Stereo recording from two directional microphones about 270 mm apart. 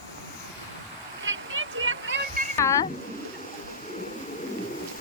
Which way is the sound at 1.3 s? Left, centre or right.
Right.